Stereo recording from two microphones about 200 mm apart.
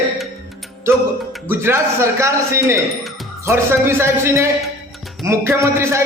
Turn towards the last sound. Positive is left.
turn(degrees=-15)  # may be behind; listen again after turning